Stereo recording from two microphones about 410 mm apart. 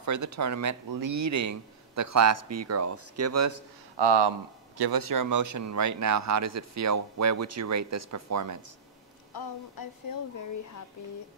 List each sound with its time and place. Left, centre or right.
0.0 s speech: right
3.9 s speech: right
4.7 s speech: right